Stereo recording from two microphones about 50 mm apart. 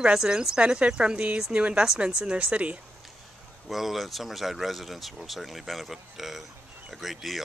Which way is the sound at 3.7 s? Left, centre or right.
Centre.